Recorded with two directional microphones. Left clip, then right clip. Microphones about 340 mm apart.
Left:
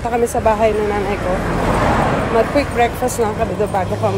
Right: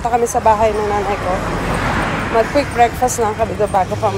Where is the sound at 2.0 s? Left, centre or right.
Left.